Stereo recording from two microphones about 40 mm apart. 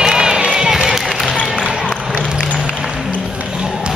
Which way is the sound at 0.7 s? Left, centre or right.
Centre.